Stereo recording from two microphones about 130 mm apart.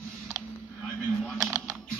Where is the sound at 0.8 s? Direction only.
5° left (ahead or behind).